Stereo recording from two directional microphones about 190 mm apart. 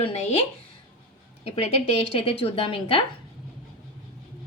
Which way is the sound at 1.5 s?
35° left (ahead or behind).